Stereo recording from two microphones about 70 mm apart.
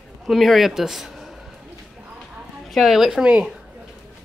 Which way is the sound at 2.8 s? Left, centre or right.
Centre.